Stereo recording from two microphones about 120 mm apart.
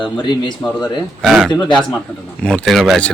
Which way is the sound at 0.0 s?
35° left (ahead or behind).